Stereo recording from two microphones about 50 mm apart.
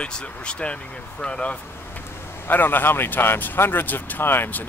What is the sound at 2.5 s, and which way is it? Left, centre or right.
Speech, left.